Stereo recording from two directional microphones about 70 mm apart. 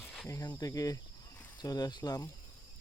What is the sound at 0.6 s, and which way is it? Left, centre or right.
Speech, left.